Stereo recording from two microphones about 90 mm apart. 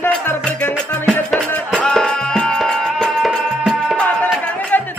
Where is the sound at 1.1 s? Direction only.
20° left (ahead or behind).